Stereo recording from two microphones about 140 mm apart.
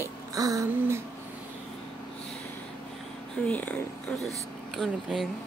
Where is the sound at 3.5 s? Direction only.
10° left (ahead or behind).